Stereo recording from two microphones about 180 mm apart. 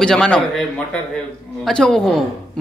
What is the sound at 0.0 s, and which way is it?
A man's voice, 5° left (ahead or behind).